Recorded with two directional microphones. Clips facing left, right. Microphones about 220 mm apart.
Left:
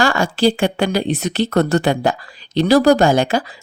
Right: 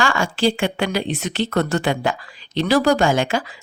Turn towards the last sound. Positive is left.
turn(degrees=35)  # may be behind; listen again after turning